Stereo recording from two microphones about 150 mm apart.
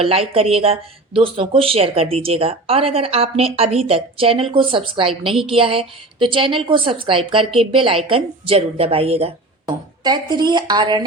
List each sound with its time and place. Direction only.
0.0 s speech: 40° right (ahead or behind)
9.6 s speech: 30° right (ahead or behind)